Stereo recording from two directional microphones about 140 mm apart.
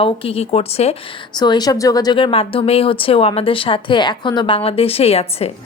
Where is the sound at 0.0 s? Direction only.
40° left (ahead or behind).